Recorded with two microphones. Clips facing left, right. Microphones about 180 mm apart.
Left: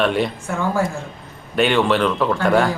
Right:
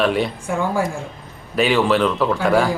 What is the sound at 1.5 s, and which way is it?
Speech, centre (ahead or behind).